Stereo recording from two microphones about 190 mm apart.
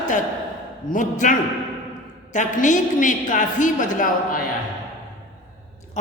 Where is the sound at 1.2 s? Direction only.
40° left (ahead or behind).